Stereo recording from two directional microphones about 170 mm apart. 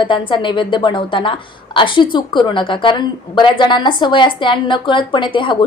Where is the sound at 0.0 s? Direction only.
30° left (ahead or behind).